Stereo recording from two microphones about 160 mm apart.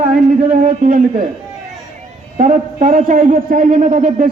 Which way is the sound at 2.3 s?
55° right (ahead or behind).